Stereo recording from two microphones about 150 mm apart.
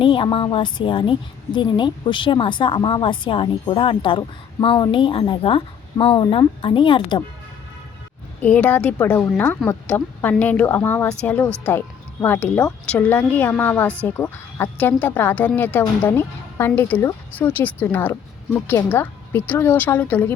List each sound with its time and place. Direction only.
0.0 s a woman's voice: 35° left (ahead or behind)
8.4 s speech: 10° left (ahead or behind)